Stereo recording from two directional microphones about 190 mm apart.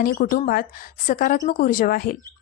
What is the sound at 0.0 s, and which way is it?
A woman's voice, 50° left (ahead or behind).